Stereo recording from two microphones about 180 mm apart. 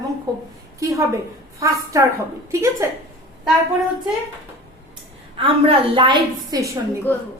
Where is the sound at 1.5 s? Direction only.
15° right (ahead or behind).